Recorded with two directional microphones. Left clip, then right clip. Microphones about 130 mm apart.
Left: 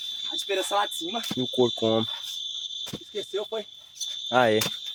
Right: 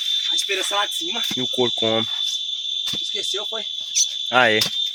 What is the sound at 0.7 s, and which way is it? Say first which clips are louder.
Speech: right 4 dB; 85° left.